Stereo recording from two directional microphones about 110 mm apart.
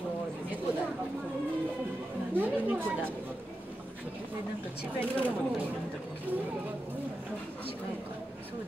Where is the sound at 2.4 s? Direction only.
15° right (ahead or behind).